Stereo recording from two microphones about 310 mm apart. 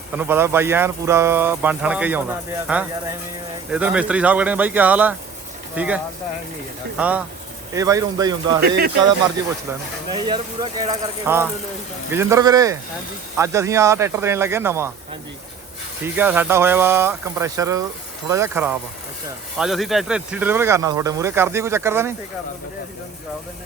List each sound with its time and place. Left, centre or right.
0.1 s speech: centre
8.6 s speech: right
10.1 s speech: centre
16.0 s speech: centre